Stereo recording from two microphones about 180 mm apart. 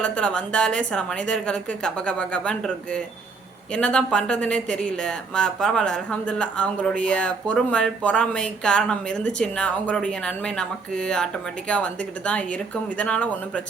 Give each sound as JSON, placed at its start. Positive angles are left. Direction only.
{"t": 0.0, "sound": "speech", "side_deg": 5}